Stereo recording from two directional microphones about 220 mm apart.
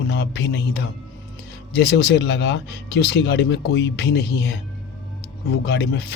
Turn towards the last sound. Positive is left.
turn(degrees=50)  # may be behind; listen again after turning